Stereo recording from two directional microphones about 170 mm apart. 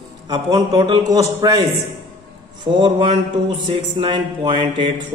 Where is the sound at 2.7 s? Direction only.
30° right (ahead or behind).